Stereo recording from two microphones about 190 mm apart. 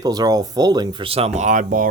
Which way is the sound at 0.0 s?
20° right (ahead or behind).